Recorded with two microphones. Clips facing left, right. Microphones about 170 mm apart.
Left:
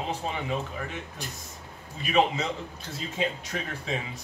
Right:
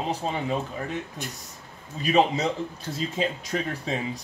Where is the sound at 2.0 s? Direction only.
35° right (ahead or behind).